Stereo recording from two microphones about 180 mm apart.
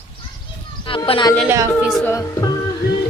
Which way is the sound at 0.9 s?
30° left (ahead or behind).